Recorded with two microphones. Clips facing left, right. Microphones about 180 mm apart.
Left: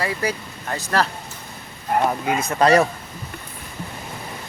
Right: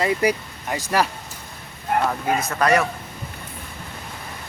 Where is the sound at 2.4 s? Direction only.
30° left (ahead or behind).